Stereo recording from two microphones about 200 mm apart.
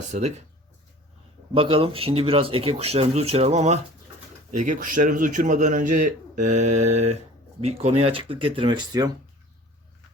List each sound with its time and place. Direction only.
0.1 s a man's voice: 35° right (ahead or behind)
1.5 s a man's voice: 25° right (ahead or behind)